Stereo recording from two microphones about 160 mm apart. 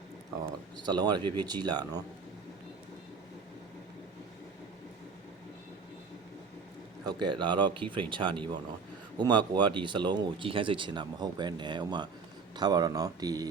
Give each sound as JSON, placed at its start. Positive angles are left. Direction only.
{"t": 0.8, "sound": "speech", "side_deg": -25}
{"t": 7.2, "sound": "a man's voice", "side_deg": -30}